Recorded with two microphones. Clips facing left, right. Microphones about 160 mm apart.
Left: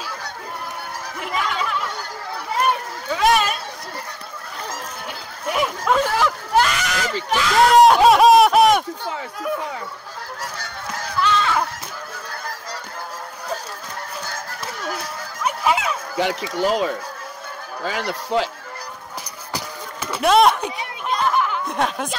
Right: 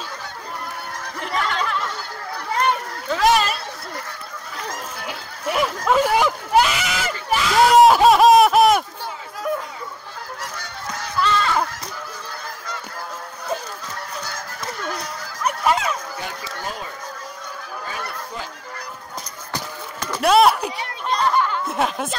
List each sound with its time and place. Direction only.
1.2 s chatter: 5° left (ahead or behind)
2.5 s a sound: 5° left (ahead or behind)
4.6 s a sound: centre (ahead or behind)
11.1 s music: centre (ahead or behind)
15.0 s dog: 5° left (ahead or behind)
16.5 s speech: 85° left
19.5 s music: 10° left (ahead or behind)
20.2 s a sound: centre (ahead or behind)
21.6 s speech: 5° right (ahead or behind)